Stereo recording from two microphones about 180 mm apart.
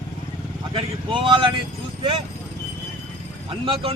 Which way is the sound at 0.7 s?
25° right (ahead or behind).